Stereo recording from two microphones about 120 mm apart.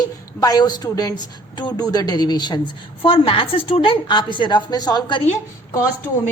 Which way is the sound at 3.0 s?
50° left (ahead or behind).